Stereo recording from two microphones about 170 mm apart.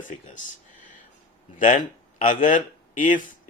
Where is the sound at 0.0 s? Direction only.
45° left (ahead or behind).